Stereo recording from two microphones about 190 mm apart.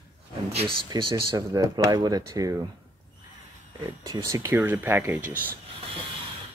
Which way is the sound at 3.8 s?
20° right (ahead or behind).